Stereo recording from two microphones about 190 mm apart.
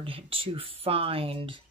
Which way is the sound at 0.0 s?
30° right (ahead or behind).